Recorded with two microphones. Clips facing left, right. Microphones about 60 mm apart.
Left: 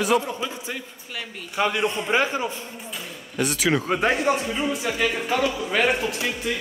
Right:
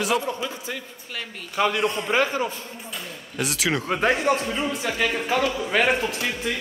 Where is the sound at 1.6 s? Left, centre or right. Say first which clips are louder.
Right 1 dB; centre.